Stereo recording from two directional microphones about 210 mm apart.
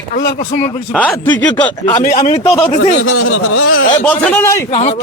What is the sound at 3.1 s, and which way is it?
Speech, 75° left (ahead or behind).